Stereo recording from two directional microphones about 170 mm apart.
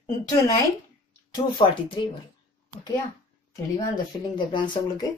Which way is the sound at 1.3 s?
30° left (ahead or behind).